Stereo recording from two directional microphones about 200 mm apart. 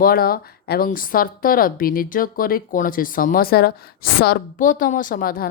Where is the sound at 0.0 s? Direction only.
50° left (ahead or behind).